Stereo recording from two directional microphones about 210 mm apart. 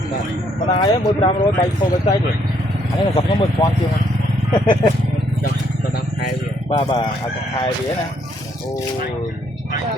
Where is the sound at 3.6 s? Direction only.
15° left (ahead or behind).